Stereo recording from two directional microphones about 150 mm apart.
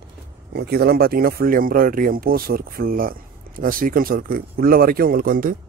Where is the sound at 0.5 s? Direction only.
90° right; by 5.5 s 70° right (ahead or behind).